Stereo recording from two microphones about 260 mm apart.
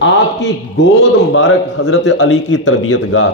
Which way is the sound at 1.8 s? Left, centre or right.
Left.